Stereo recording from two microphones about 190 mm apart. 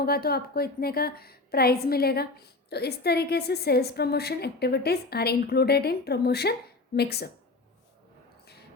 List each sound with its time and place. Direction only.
0.0 s a woman's voice: 55° left (ahead or behind)